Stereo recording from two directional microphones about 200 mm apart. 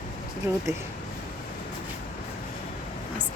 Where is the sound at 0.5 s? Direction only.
15° right (ahead or behind).